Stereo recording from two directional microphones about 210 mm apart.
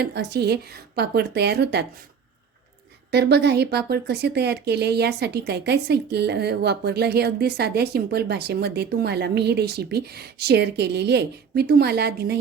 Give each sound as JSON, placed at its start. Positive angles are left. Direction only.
{"t": 0.0, "sound": "speech", "side_deg": -50}
{"t": 3.1, "sound": "speech", "side_deg": -50}